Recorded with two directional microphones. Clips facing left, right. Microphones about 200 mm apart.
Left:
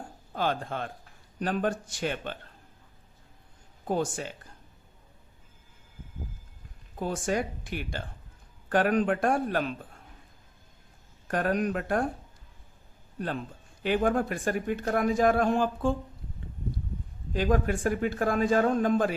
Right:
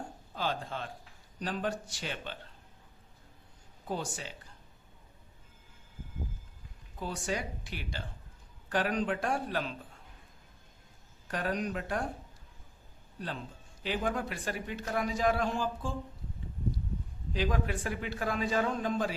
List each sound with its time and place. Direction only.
0.3 s a man's voice: 55° left (ahead or behind)
3.8 s a man's voice: 50° left (ahead or behind)
7.0 s a man's voice: 50° left (ahead or behind)
11.3 s a man's voice: 55° left (ahead or behind)
13.1 s a man's voice: 55° left (ahead or behind)
17.3 s a man's voice: 45° left (ahead or behind)